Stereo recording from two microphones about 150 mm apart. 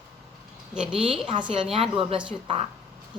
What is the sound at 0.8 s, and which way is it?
Speech, 5° right (ahead or behind).